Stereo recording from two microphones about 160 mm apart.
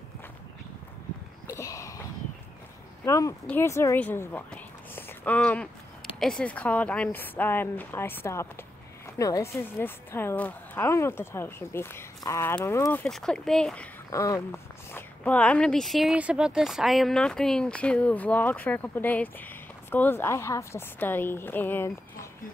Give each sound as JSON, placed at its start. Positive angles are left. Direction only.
{"t": 1.5, "sound": "a sound", "side_deg": 20}
{"t": 3.1, "sound": "a woman's voice", "side_deg": 20}
{"t": 14.1, "sound": "speech", "side_deg": 20}